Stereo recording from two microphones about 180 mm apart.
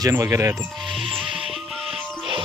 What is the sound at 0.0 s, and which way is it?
Speech, 15° right (ahead or behind).